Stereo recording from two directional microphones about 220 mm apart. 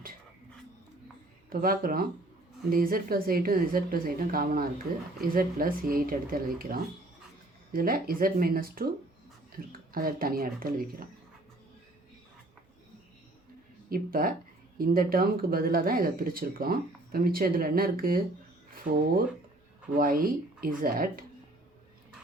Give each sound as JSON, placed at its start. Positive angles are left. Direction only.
{"t": 1.5, "sound": "speech", "side_deg": -40}
{"t": 13.9, "sound": "speech", "side_deg": -40}